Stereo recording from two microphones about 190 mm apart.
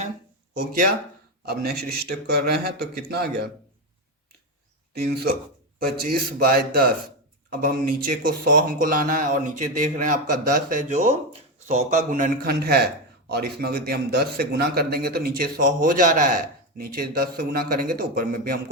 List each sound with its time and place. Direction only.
1.5 s a man's voice: 55° right (ahead or behind)
4.9 s a man's voice: 55° right (ahead or behind)